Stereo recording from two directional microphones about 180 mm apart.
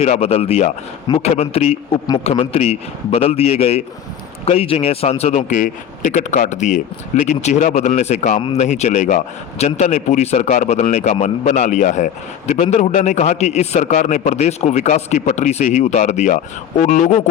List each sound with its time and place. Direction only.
0.0 s a man's voice: 35° left (ahead or behind)